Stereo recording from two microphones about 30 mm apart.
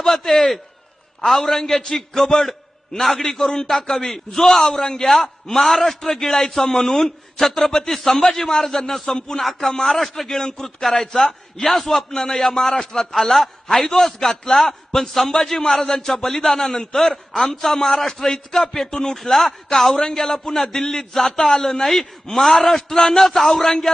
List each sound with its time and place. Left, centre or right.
0.0 s a man's voice: centre